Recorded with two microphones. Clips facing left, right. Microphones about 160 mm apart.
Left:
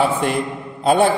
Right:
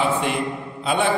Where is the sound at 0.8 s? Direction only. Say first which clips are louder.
Left 7 dB; 40° left (ahead or behind).